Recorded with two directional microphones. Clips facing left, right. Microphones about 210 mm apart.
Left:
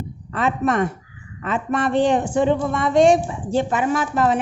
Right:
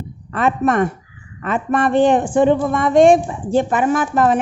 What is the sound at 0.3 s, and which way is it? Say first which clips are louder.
A woman's voice: right 3 dB; 55° right (ahead or behind).